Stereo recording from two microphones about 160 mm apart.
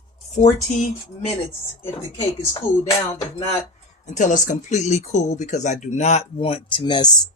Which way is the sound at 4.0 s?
50° left (ahead or behind).